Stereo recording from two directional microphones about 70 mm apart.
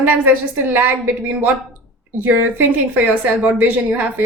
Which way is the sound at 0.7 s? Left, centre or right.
Right.